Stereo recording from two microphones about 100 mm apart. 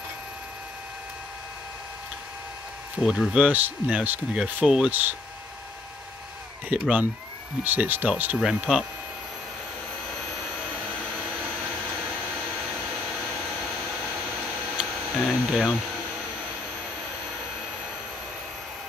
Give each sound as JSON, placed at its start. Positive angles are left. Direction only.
{"t": 3.0, "sound": "speech", "side_deg": -5}
{"t": 6.7, "sound": "speech", "side_deg": -15}
{"t": 14.8, "sound": "a sound", "side_deg": 0}